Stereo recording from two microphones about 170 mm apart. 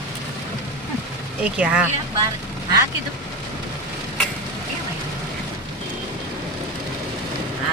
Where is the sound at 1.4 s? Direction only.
5° right (ahead or behind).